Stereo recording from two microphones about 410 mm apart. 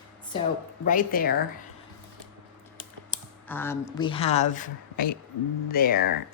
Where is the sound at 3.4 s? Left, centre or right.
Centre; by 6.1 s left.